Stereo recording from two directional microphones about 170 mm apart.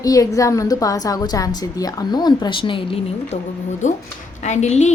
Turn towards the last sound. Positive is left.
turn(degrees=40)  # may be behind; listen again after turning